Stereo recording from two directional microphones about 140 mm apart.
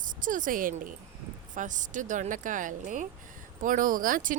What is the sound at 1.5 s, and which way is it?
Speech, 65° right (ahead or behind).